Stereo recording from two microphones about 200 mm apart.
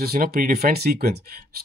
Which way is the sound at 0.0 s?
50° right (ahead or behind).